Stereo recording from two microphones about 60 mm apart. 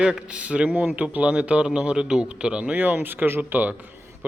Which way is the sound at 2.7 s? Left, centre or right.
Right.